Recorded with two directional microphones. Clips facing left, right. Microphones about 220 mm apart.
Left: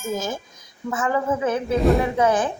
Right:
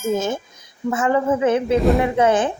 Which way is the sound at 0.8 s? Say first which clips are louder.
Right 4 dB; 25° right (ahead or behind).